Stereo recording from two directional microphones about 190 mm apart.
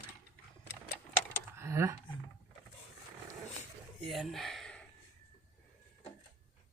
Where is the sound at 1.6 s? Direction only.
15° right (ahead or behind).